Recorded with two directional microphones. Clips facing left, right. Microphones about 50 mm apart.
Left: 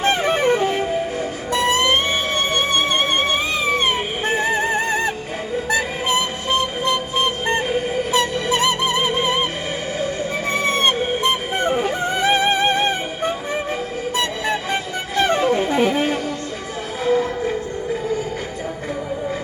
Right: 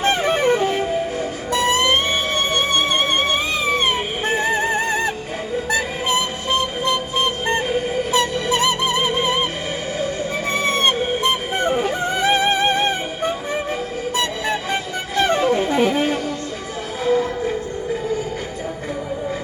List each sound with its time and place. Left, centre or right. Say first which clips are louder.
0.0 s music: even; left
5.7 s music: left 1 dB; left
17.0 s music: even; left